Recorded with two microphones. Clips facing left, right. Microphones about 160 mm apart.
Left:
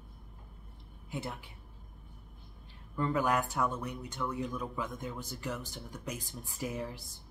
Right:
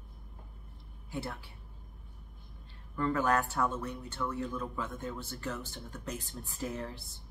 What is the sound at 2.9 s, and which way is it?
Speech, 15° left (ahead or behind).